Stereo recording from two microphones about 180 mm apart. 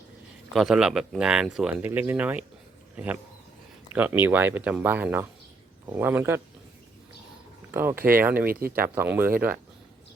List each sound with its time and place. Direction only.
0.5 s speech: centre (ahead or behind)
7.7 s speech: 10° right (ahead or behind)
7.9 s speech: 55° right (ahead or behind)
8.2 s speech: 10° right (ahead or behind)